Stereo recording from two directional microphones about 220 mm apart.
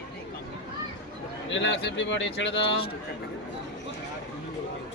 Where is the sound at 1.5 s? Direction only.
55° left (ahead or behind).